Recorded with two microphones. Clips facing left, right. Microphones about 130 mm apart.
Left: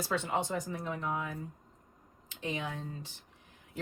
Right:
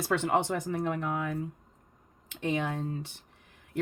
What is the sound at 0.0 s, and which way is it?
A woman's voice, 65° right (ahead or behind).